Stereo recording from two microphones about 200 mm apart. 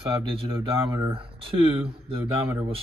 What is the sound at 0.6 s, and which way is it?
Speech, 15° right (ahead or behind).